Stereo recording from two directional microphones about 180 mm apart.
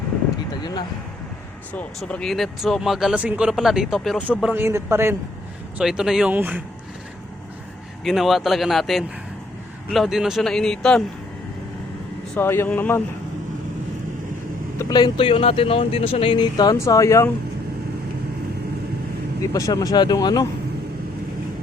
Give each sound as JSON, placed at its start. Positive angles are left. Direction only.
{"t": 0.5, "sound": "a sound", "side_deg": 25}
{"t": 1.7, "sound": "speech", "side_deg": 5}
{"t": 5.7, "sound": "speech", "side_deg": -5}
{"t": 8.0, "sound": "speech", "side_deg": 0}
{"t": 12.3, "sound": "speech", "side_deg": 10}
{"t": 14.8, "sound": "speech", "side_deg": 20}
{"t": 19.5, "sound": "speech", "side_deg": 20}